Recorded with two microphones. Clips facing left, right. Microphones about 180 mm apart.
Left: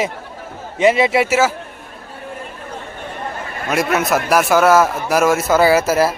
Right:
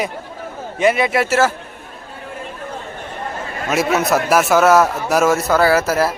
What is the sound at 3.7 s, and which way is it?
A man's voice, centre (ahead or behind).